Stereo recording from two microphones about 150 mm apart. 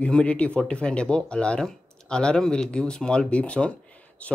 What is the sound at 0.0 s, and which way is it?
Speech, 5° left (ahead or behind).